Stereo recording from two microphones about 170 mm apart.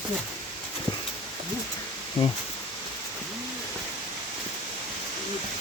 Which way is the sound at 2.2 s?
35° left (ahead or behind).